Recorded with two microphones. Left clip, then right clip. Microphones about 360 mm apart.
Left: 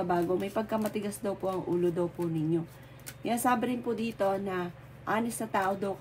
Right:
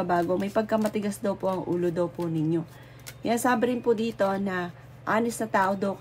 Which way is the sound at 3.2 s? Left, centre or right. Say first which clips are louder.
Right 4 dB; right.